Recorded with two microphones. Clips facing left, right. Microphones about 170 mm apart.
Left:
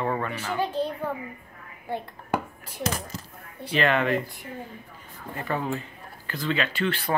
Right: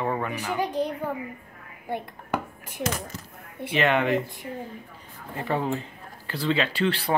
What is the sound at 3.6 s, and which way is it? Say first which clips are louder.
Speech: right 1 dB; 20° right (ahead or behind).